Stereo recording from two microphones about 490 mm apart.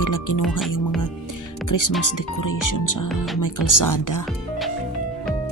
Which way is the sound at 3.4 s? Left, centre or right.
Left.